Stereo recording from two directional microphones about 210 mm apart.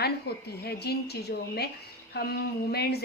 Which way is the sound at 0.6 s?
50° left (ahead or behind).